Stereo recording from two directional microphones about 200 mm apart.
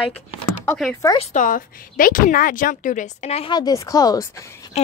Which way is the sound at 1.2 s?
40° left (ahead or behind).